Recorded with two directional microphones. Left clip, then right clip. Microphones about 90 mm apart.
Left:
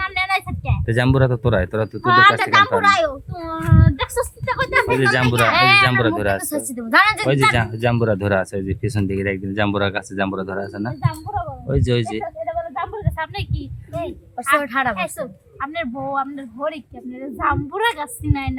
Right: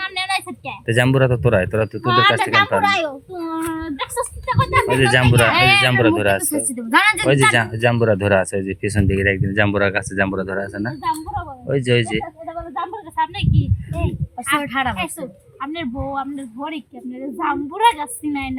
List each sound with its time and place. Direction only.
0.0 s a sound: 30° left (ahead or behind)
0.9 s speech: 5° left (ahead or behind)
2.0 s speech: 30° left (ahead or behind)
2.7 s child singing: 30° left (ahead or behind)
4.9 s speech: centre (ahead or behind)
5.2 s a woman's voice: 25° left (ahead or behind); by 12.2 s 5° left (ahead or behind)
12.7 s a sound: 10° left (ahead or behind)
15.2 s a woman's voice: 35° left (ahead or behind)
16.1 s speech: 20° left (ahead or behind)